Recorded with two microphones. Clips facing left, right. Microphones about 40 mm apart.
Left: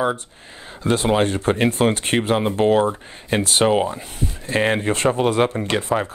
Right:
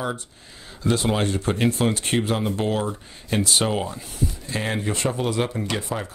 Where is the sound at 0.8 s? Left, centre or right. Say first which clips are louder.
Left 4 dB; left.